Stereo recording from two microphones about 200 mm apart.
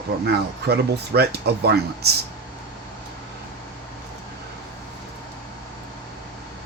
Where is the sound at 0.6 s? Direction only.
55° right (ahead or behind).